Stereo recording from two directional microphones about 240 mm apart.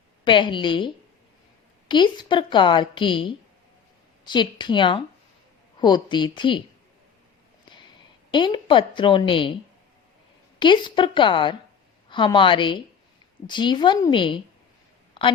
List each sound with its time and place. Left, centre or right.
0.3 s a woman's voice: centre
1.9 s a woman's voice: centre
8.3 s a woman's voice: centre
10.6 s a woman's voice: centre